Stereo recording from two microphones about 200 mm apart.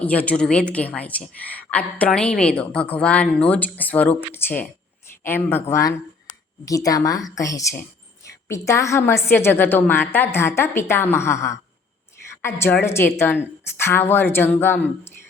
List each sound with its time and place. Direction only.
0.0 s a woman's voice: 5° left (ahead or behind)